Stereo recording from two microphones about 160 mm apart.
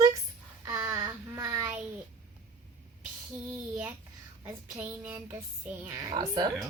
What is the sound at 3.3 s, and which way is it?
Child singing, 10° right (ahead or behind).